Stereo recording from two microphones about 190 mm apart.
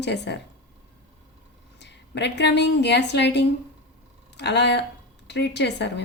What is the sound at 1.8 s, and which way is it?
A woman's voice, 65° left (ahead or behind).